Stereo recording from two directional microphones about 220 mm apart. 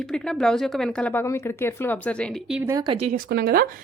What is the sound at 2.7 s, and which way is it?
Speech, 20° right (ahead or behind).